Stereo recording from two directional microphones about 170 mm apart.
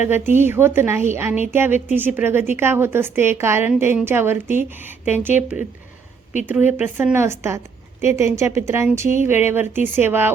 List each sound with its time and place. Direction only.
0.0 s a woman's voice: 15° right (ahead or behind)